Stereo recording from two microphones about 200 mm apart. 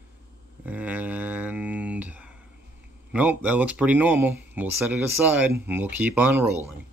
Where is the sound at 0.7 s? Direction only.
10° right (ahead or behind).